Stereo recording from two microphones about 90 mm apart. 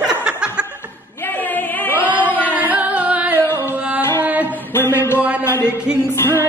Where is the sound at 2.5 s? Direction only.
15° right (ahead or behind).